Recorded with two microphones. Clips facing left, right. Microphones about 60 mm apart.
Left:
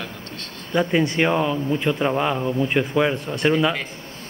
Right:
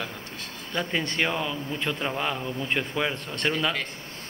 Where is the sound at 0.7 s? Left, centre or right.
Centre.